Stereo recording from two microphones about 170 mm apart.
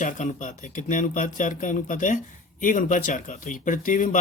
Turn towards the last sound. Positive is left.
turn(degrees=50)  # may be behind; listen again after turning